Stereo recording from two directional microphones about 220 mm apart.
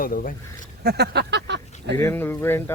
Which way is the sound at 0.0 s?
40° left (ahead or behind).